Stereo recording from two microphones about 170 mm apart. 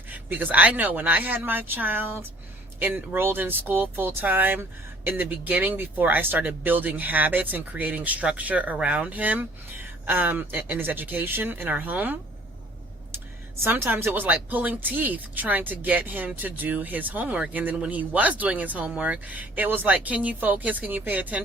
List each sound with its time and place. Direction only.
0.1 s speech: 10° right (ahead or behind)
13.6 s speech: 15° right (ahead or behind)